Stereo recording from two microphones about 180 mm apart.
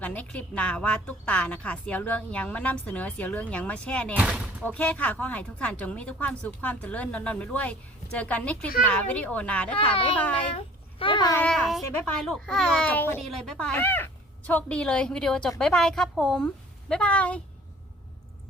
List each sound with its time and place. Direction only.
0.0 s a woman's voice: 10° left (ahead or behind)
4.2 s speech: 5° right (ahead or behind)
4.6 s a woman's voice: 10° left (ahead or behind)
11.0 s a child's voice: 25° left (ahead or behind)
11.3 s a woman's voice: 5° left (ahead or behind)